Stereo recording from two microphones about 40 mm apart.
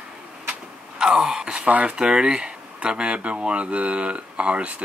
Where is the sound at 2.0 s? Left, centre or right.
Right.